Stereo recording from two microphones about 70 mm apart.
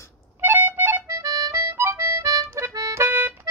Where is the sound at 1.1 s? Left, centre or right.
Right.